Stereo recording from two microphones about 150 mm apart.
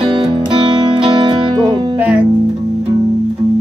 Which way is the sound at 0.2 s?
30° right (ahead or behind).